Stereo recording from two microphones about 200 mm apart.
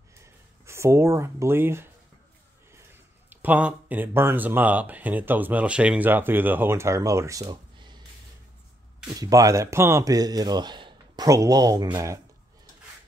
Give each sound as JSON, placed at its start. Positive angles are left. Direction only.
{"t": 0.2, "sound": "speech", "side_deg": -15}
{"t": 9.0, "sound": "speech", "side_deg": -20}